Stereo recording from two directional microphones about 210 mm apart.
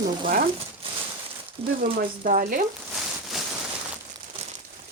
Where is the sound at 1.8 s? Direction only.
40° right (ahead or behind).